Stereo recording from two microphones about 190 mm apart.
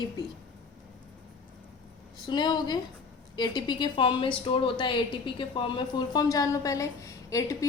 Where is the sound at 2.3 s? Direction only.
20° left (ahead or behind).